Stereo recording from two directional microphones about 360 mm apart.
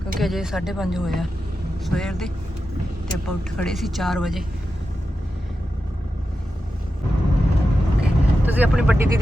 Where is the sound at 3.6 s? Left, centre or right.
Centre.